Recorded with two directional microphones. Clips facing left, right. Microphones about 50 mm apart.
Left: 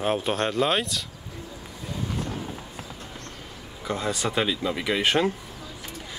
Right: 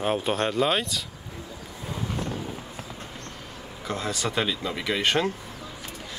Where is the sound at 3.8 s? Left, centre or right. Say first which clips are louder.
Left 2 dB; centre.